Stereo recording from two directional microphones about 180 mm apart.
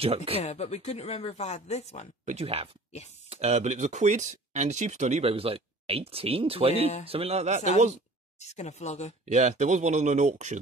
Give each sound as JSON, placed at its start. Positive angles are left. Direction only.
{"t": 0.0, "sound": "speech", "side_deg": -35}
{"t": 0.4, "sound": "speech", "side_deg": 35}
{"t": 2.2, "sound": "speech", "side_deg": -35}
{"t": 8.4, "sound": "speech", "side_deg": 40}
{"t": 9.3, "sound": "speech", "side_deg": -40}